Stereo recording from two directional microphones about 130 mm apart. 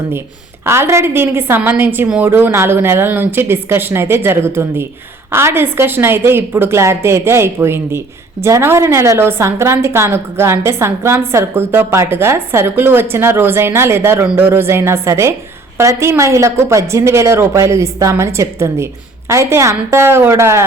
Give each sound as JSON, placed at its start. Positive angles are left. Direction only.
{"t": 0.6, "sound": "a woman's voice", "side_deg": -20}